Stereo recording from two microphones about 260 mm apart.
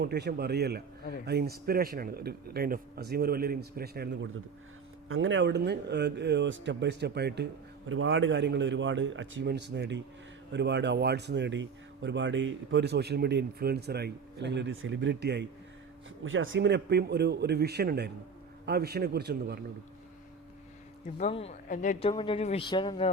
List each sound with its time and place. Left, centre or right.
0.0 s speech: right
7.9 s a man's voice: right
21.2 s speech: left
22.1 s speech: centre